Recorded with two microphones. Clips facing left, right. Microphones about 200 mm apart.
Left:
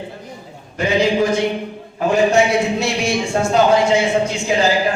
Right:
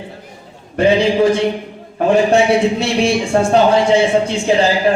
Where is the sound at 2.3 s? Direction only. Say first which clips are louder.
Right 3 dB; 30° right (ahead or behind).